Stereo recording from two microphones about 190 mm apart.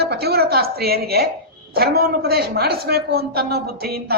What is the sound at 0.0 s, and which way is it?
A woman's voice, 55° right (ahead or behind).